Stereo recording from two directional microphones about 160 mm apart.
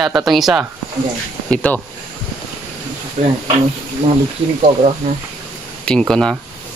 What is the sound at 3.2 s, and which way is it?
Speech, 45° right (ahead or behind).